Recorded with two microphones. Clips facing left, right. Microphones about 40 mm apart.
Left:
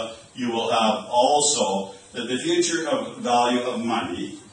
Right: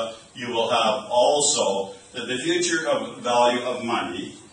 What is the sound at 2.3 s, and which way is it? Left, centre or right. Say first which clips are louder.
Speech: left 1 dB; right.